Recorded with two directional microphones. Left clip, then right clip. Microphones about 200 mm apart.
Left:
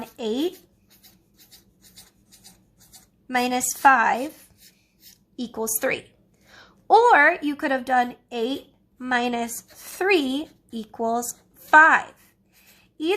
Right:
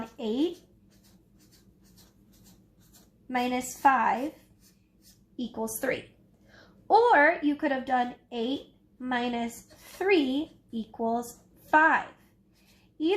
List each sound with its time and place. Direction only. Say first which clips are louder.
0.2 s speech: left 4 dB; 40° left (ahead or behind)
3.2 s speech: left 6 dB; 40° left (ahead or behind)
5.5 s a woman's voice: left 6 dB; 35° left (ahead or behind)